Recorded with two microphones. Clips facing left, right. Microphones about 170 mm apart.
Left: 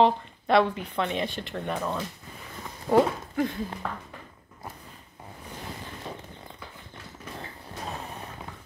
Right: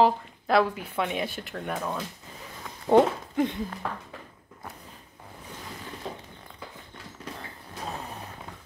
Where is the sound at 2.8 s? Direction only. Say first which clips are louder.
Right 2 dB; 20° right (ahead or behind).